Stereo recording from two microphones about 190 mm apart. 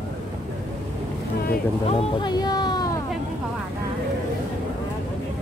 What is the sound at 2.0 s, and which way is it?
Speech, 25° left (ahead or behind).